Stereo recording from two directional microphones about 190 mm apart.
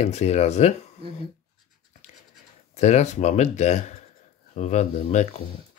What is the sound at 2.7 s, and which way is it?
Speech, 35° left (ahead or behind).